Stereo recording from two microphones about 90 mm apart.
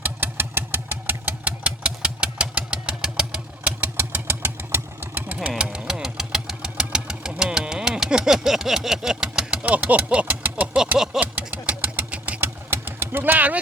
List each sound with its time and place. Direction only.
0.0 s engine: 20° right (ahead or behind)
11.3 s vehicle: 20° right (ahead or behind)